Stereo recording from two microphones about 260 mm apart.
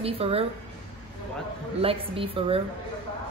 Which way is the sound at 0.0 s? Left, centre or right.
Right.